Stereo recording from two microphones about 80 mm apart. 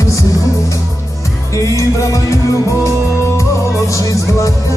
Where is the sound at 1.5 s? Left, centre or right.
Left.